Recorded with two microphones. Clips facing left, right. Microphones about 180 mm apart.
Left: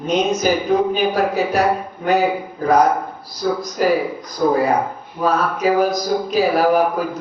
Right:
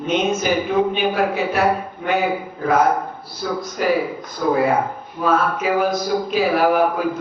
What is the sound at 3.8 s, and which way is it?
Speech, 40° left (ahead or behind).